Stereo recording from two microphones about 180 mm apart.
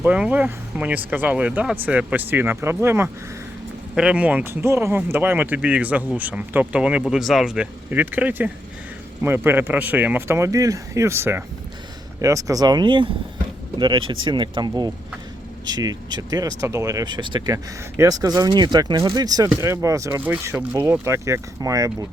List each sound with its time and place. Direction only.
0.0 s speech: 10° right (ahead or behind)
16.1 s speech: 20° right (ahead or behind)